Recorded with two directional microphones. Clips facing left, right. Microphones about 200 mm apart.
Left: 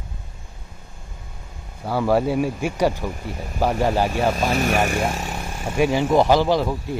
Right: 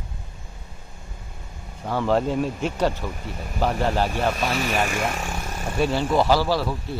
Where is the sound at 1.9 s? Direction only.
10° left (ahead or behind).